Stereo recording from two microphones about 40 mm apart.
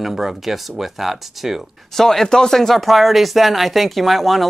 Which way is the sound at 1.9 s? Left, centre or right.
Centre.